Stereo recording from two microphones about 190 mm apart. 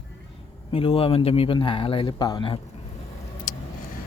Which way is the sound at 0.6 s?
30° left (ahead or behind).